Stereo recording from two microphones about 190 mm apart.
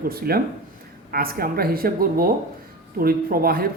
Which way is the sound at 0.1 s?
55° right (ahead or behind).